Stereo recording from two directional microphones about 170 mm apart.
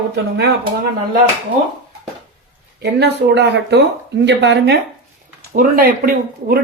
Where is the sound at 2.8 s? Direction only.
75° right (ahead or behind).